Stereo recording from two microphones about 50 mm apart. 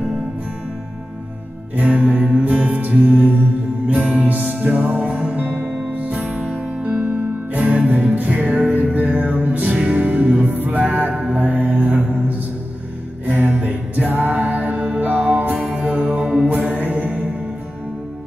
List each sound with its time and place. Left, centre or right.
1.8 s music: right
11.4 s mantra: right
13.2 s music: right